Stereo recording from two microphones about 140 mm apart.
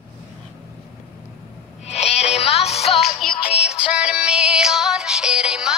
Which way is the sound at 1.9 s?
50° left (ahead or behind).